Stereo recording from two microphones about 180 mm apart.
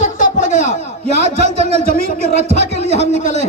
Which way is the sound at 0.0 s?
45° left (ahead or behind).